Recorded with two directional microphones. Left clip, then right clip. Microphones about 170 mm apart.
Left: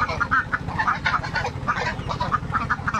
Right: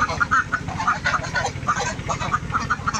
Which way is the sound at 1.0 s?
35° right (ahead or behind).